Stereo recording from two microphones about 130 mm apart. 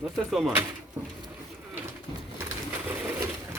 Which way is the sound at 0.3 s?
Centre (ahead or behind).